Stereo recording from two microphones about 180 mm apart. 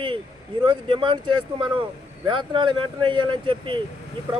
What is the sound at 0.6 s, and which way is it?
Speech, 30° right (ahead or behind).